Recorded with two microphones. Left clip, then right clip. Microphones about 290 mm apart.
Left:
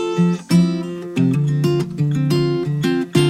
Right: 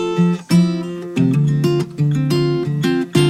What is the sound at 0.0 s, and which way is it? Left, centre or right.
Music, centre.